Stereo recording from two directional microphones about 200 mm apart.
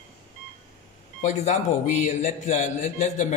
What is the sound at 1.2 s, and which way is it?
A man's voice, 35° left (ahead or behind).